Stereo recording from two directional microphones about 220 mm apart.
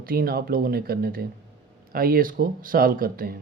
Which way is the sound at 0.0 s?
40° right (ahead or behind).